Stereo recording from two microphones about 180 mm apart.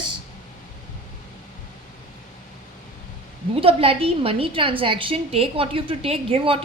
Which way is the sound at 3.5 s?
30° right (ahead or behind).